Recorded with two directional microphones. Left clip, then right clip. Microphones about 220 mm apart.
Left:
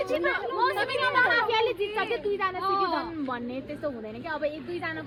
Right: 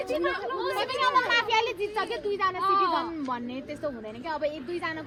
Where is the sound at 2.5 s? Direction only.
40° right (ahead or behind).